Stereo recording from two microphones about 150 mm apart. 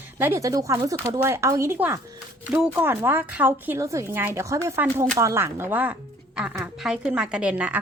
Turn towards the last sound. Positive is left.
turn(degrees=-10)  # may be behind; listen again after turning